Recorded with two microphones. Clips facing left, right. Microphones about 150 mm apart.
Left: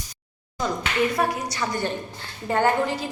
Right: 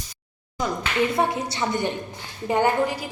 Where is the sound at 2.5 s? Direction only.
15° right (ahead or behind).